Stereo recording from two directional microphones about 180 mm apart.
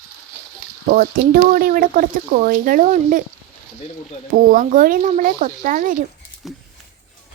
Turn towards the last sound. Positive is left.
turn(degrees=0)  # may be behind; listen again after turning